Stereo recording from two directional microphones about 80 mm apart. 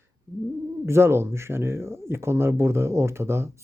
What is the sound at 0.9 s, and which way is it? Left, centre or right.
Speech, right.